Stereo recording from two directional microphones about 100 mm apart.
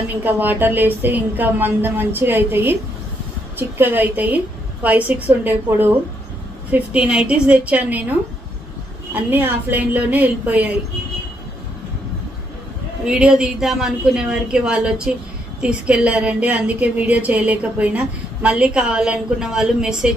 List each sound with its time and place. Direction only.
0.2 s a woman's voice: 20° right (ahead or behind)
13.0 s a woman's voice: 10° right (ahead or behind)